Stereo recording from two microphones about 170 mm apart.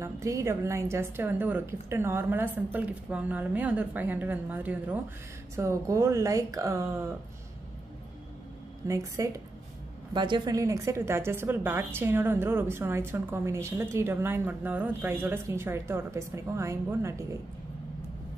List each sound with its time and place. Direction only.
0.0 s a woman's voice: 15° right (ahead or behind)
8.8 s a woman's voice: 20° right (ahead or behind)